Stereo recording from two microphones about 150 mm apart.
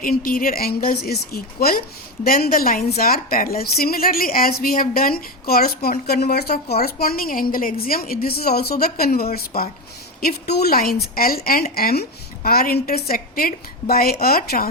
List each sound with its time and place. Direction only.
0.0 s a woman's voice: 75° left (ahead or behind)
11.7 s a woman's voice: 90° left